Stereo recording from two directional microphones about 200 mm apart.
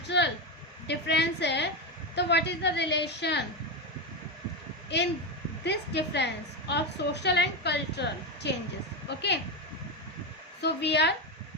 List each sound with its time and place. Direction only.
0.1 s a sound: 60° left (ahead or behind)
0.9 s a woman's voice: 60° left (ahead or behind)
5.6 s a woman's voice: 60° left (ahead or behind)
10.6 s a woman's voice: 55° left (ahead or behind)